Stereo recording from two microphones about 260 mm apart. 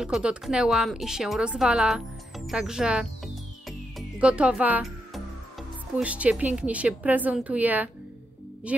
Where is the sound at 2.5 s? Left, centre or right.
Centre.